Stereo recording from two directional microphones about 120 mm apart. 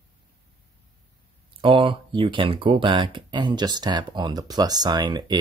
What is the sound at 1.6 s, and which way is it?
Speech, 45° right (ahead or behind).